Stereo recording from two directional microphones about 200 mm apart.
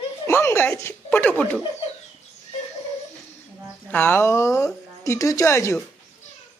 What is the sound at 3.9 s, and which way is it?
Speech, 10° left (ahead or behind).